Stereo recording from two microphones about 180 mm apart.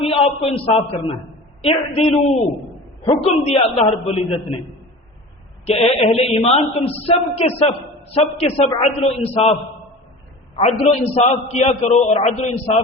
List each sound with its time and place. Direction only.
0.0 s a man's voice: 35° left (ahead or behind)
5.6 s a man's voice: 35° left (ahead or behind)
10.6 s a man's voice: 40° left (ahead or behind)